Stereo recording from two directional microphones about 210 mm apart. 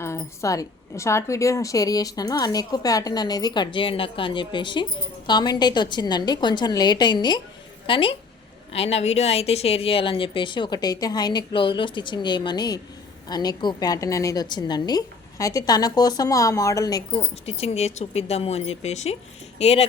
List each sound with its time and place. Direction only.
0.0 s a woman's voice: 15° left (ahead or behind); by 19.9 s 30° left (ahead or behind)